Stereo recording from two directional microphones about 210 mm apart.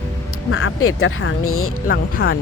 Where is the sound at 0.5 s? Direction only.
75° left (ahead or behind).